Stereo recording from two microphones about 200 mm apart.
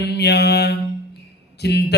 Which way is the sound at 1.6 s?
55° left (ahead or behind).